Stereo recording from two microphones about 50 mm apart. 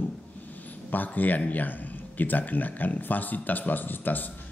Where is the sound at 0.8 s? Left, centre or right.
Left.